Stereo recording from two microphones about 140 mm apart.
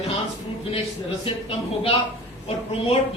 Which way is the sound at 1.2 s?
40° left (ahead or behind).